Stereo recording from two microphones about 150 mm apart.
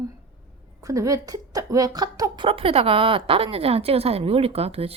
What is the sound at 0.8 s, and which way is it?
A woman's voice, 20° right (ahead or behind).